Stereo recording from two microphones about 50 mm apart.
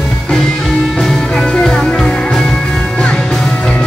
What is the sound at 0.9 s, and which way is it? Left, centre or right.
Music, centre.